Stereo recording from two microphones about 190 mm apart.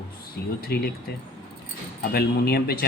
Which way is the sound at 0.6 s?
55° left (ahead or behind).